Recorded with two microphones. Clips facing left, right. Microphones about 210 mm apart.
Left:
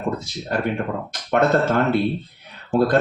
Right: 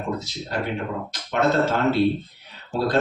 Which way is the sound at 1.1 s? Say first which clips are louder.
Left 2 dB; 55° left (ahead or behind).